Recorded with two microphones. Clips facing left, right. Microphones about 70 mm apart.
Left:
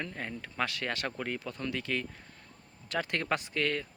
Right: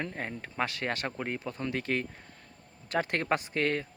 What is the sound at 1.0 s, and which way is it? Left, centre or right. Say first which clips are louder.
A man's voice: right 1 dB; right.